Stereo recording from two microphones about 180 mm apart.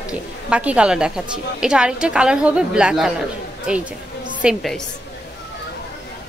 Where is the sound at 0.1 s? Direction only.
5° right (ahead or behind).